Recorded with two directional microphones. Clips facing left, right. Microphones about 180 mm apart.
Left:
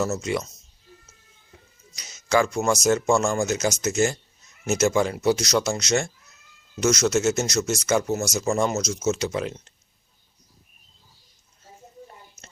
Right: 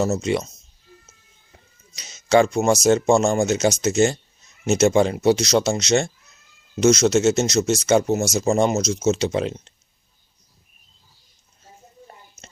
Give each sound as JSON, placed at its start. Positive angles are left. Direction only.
{"t": 0.0, "sound": "speech", "side_deg": -25}
{"t": 2.0, "sound": "speech", "side_deg": -25}